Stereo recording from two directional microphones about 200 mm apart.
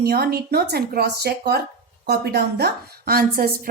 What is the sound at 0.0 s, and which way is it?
A woman's voice, 50° right (ahead or behind).